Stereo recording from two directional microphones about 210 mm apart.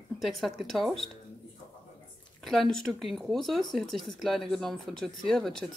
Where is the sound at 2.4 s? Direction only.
Centre (ahead or behind).